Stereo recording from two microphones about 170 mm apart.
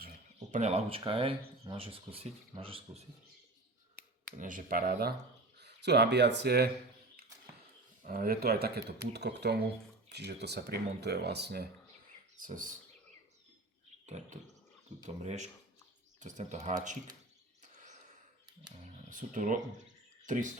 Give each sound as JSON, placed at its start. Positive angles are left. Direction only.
{"t": 0.3, "sound": "speech", "side_deg": -45}
{"t": 4.3, "sound": "speech", "side_deg": -50}
{"t": 5.5, "sound": "speech", "side_deg": -80}
{"t": 8.0, "sound": "speech", "side_deg": -55}
{"t": 9.1, "sound": "speech", "side_deg": -80}
{"t": 12.4, "sound": "speech", "side_deg": -50}
{"t": 15.2, "sound": "speech", "side_deg": -40}
{"t": 18.8, "sound": "speech", "side_deg": -50}